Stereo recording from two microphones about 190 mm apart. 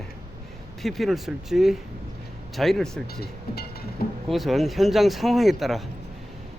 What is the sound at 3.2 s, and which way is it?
Speech, 55° left (ahead or behind).